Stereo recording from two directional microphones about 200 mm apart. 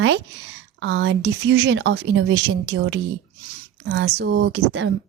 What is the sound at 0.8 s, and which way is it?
A woman's voice, 65° right (ahead or behind).